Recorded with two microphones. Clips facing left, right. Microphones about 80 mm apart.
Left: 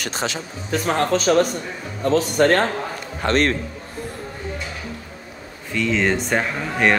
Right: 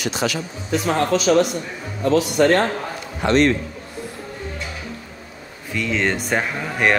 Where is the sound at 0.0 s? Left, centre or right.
Left.